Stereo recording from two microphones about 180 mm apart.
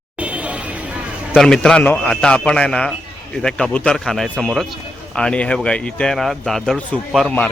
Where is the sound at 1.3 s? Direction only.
Centre (ahead or behind).